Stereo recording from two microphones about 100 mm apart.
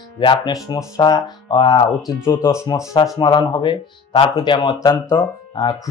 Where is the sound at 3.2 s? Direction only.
45° left (ahead or behind).